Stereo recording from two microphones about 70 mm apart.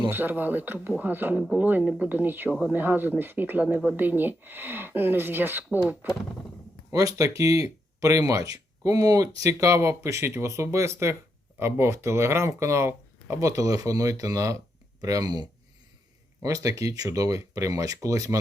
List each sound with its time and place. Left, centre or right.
0.1 s speech: right
6.9 s speech: right
16.4 s speech: right